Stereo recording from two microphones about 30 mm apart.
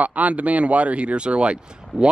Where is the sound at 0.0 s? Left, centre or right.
Right.